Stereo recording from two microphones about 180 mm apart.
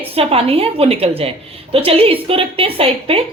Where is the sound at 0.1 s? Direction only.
30° right (ahead or behind).